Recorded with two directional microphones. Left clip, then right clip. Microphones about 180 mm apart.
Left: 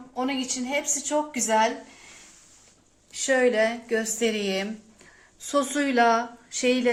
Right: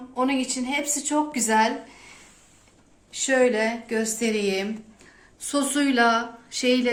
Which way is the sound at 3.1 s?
55° left (ahead or behind).